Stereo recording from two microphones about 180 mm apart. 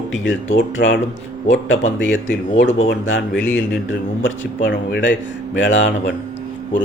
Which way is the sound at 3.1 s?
90° left.